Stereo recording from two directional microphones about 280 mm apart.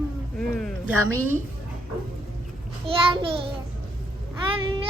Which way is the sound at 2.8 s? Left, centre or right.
Centre.